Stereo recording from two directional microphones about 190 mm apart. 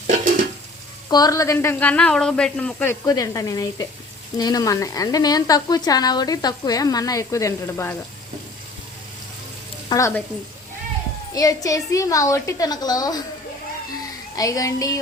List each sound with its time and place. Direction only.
1.1 s speech: 20° left (ahead or behind)
9.9 s speech: 20° left (ahead or behind)
11.3 s speech: 20° left (ahead or behind)
14.3 s speech: 20° left (ahead or behind)